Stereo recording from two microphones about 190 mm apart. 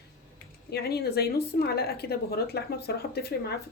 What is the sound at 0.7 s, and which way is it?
Speech, 55° left (ahead or behind).